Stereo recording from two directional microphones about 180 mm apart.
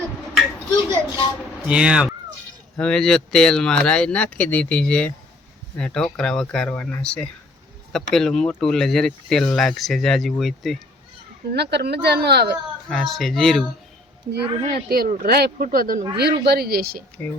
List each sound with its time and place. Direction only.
0.9 s a sound: 20° left (ahead or behind)
1.6 s speech: 5° right (ahead or behind)
11.5 s speech: 65° right (ahead or behind)
12.9 s speech: centre (ahead or behind)
14.7 s speech: 55° right (ahead or behind)
16.1 s speech: 65° right (ahead or behind)
17.2 s speech: 10° left (ahead or behind)